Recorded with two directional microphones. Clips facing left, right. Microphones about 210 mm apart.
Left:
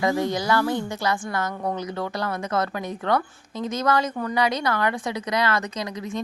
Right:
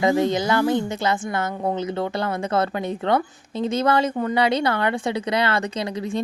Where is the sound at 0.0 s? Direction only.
20° right (ahead or behind).